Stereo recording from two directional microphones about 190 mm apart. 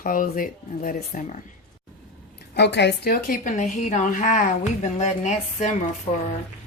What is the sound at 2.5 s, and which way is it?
Speech, 65° left (ahead or behind).